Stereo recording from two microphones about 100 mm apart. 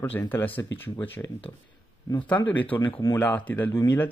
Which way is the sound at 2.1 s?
30° left (ahead or behind).